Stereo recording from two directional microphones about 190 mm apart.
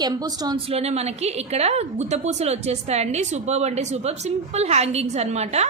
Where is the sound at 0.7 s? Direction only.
35° right (ahead or behind).